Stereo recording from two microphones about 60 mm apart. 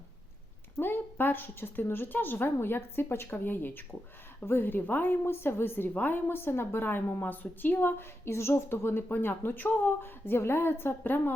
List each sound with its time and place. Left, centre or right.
0.8 s a woman's voice: left